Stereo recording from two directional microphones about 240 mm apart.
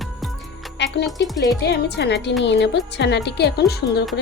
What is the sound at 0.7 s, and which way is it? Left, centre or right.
Music, left.